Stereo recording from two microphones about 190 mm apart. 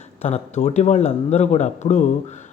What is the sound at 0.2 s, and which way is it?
Speech, 35° left (ahead or behind).